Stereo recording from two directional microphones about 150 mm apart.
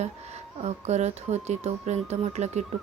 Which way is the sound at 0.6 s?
45° right (ahead or behind).